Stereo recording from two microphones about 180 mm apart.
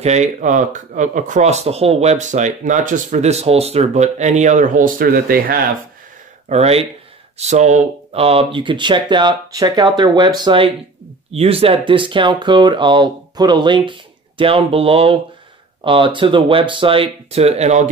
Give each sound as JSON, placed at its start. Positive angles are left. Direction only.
{"t": 0.0, "sound": "speech", "side_deg": -40}
{"t": 6.5, "sound": "speech", "side_deg": -35}